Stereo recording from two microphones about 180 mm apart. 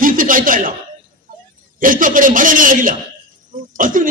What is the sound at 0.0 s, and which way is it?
Chuckle, 50° right (ahead or behind).